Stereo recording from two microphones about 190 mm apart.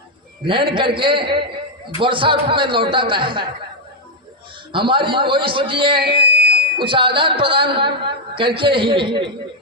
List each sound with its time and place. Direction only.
0.4 s a woman's voice: 25° right (ahead or behind)
4.9 s a woman's voice: 25° right (ahead or behind)
6.2 s fire alarm: 60° right (ahead or behind)
6.7 s a woman's voice: 25° right (ahead or behind)